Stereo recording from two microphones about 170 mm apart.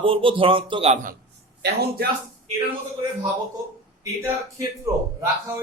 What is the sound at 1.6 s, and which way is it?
Speech, 70° right (ahead or behind).